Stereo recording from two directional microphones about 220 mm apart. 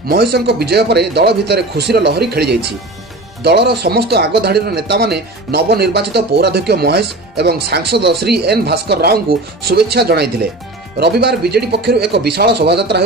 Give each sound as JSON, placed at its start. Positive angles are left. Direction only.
{"t": 0.1, "sound": "speech", "side_deg": -45}